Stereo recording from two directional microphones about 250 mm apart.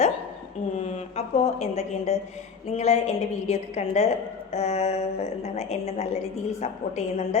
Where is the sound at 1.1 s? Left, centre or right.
Left.